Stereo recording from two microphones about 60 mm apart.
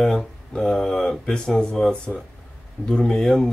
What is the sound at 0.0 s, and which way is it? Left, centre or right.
Speech, centre.